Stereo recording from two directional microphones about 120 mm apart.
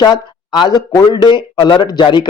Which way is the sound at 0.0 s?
40° left (ahead or behind).